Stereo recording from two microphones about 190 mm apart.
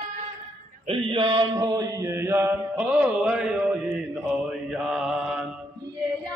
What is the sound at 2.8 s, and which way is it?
Speech, 5° right (ahead or behind).